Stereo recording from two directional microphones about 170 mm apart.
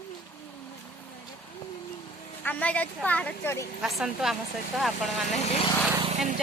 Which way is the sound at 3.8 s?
Centre (ahead or behind).